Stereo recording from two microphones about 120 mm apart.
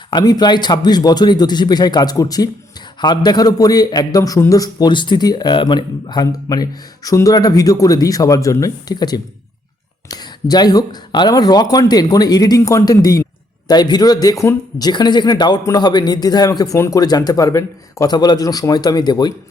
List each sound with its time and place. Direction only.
0.1 s a man's voice: 35° left (ahead or behind)